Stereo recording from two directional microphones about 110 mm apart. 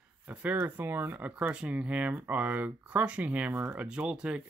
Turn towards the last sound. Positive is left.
turn(degrees=-10)  # may be behind; listen again after turning